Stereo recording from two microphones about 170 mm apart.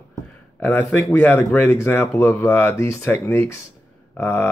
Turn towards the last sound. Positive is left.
turn(degrees=15)  # may be behind; listen again after turning